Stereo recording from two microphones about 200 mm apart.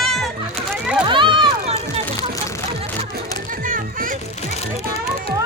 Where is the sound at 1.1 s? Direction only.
25° right (ahead or behind).